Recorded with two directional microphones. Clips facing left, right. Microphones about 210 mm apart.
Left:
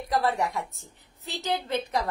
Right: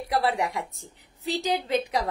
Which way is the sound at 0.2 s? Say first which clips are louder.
Right 1 dB; 15° right (ahead or behind).